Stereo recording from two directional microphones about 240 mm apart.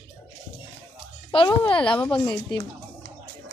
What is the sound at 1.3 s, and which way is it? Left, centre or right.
Speech, left.